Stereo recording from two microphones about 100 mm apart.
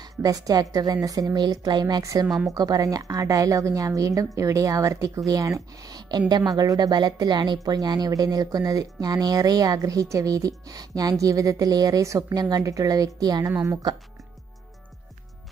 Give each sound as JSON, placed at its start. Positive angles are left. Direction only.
{"t": 0.2, "sound": "a woman's voice", "side_deg": -40}
{"t": 2.2, "sound": "a woman's voice", "side_deg": -5}
{"t": 2.5, "sound": "a woman's voice", "side_deg": -40}